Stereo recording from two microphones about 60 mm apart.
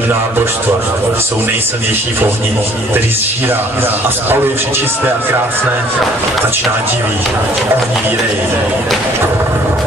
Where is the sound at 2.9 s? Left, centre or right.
Right.